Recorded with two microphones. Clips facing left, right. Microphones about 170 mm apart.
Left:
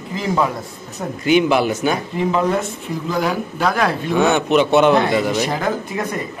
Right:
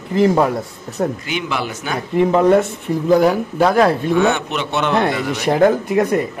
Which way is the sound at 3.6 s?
30° right (ahead or behind).